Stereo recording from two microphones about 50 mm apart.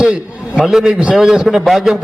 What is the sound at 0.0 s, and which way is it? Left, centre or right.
Speech, centre.